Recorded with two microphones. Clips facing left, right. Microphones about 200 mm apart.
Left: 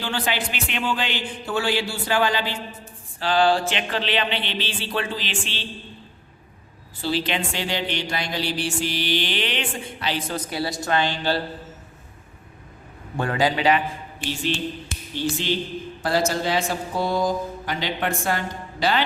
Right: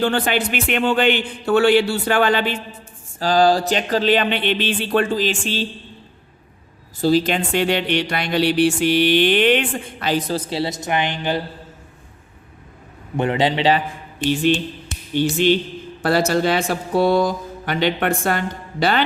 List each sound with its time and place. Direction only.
0.0 s speech: 55° right (ahead or behind)
3.2 s speech: 40° right (ahead or behind)
7.0 s speech: 45° right (ahead or behind)
10.5 s a man's voice: 25° right (ahead or behind)
13.1 s a man's voice: 20° right (ahead or behind)
14.8 s music: 60° right (ahead or behind)
16.0 s speech: 65° right (ahead or behind)